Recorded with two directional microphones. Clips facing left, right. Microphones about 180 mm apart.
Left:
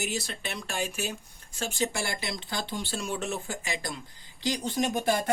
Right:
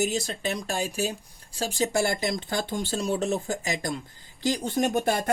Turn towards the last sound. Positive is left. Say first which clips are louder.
# right 3 dB
turn(degrees=-50)  # may be behind; listen again after turning